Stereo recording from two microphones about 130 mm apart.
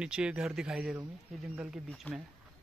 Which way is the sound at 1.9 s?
Centre (ahead or behind).